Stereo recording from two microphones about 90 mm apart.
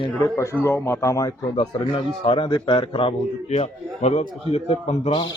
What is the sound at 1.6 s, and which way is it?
Speech, 80° left.